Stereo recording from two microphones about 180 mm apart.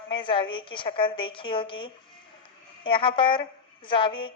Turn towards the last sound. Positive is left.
turn(degrees=25)  # may be behind; listen again after turning